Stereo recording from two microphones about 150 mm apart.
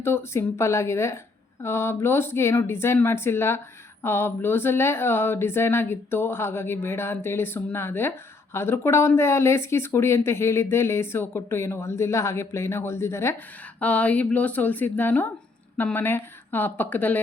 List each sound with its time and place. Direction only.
0.0 s a woman's voice: 15° left (ahead or behind)